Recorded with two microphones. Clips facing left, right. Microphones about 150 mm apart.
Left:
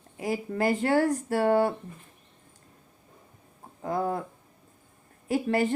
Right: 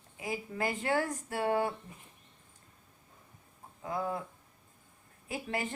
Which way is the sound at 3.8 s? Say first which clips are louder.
Left 6 dB; 40° left (ahead or behind).